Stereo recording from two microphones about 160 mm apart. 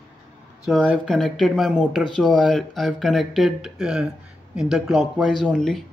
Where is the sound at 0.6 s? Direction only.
Centre (ahead or behind).